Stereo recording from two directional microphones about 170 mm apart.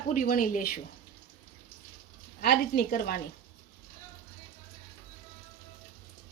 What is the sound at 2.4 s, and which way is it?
Speech, 60° left (ahead or behind).